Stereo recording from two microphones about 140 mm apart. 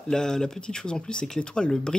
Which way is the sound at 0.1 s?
5° left (ahead or behind).